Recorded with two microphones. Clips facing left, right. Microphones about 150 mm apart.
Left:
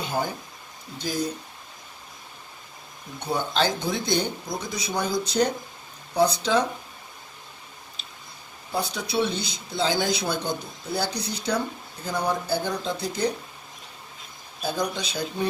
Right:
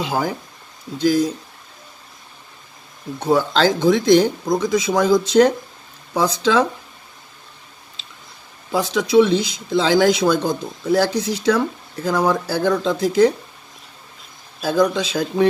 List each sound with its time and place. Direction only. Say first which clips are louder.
0.0 s speech: right 6 dB; 90° right
3.2 s speech: right 8 dB; 90° right
8.7 s speech: right 11 dB; 90° right
14.6 s speech: right 10 dB; 90° right